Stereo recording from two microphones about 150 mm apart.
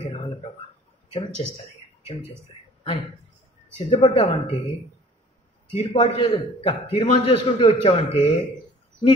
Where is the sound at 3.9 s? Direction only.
40° left (ahead or behind).